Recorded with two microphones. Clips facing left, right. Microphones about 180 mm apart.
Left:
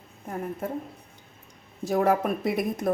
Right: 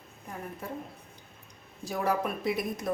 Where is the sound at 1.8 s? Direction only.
50° left (ahead or behind).